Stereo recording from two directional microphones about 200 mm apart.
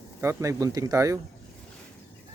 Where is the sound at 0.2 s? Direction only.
15° right (ahead or behind).